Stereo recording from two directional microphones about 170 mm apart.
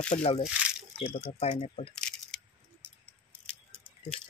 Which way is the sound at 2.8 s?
5° left (ahead or behind).